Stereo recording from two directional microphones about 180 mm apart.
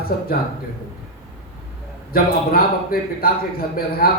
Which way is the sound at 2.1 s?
55° left (ahead or behind).